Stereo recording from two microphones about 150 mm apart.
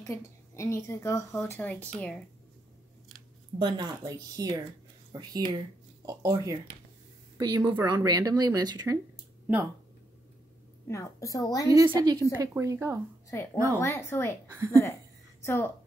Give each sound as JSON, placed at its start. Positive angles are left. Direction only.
{"t": 0.0, "sound": "a woman's voice", "side_deg": 20}
{"t": 3.5, "sound": "a woman's voice", "side_deg": -30}
{"t": 10.9, "sound": "a woman's voice", "side_deg": 20}
{"t": 11.7, "sound": "a woman's voice", "side_deg": -25}
{"t": 13.3, "sound": "a woman's voice", "side_deg": 15}
{"t": 14.5, "sound": "a woman's voice", "side_deg": -20}
{"t": 15.4, "sound": "a woman's voice", "side_deg": 15}